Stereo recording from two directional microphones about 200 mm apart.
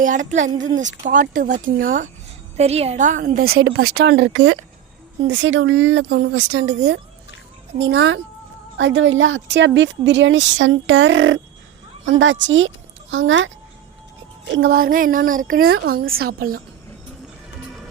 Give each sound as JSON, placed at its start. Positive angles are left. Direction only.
{"t": 0.0, "sound": "a woman's voice", "side_deg": -40}
{"t": 2.6, "sound": "a woman's voice", "side_deg": -30}
{"t": 3.6, "sound": "a woman's voice", "side_deg": -70}
{"t": 14.5, "sound": "a woman's voice", "side_deg": -55}